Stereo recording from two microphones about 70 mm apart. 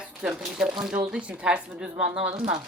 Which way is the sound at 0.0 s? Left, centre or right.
Centre.